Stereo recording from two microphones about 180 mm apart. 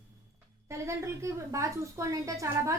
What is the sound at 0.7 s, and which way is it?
A woman's voice, 15° right (ahead or behind).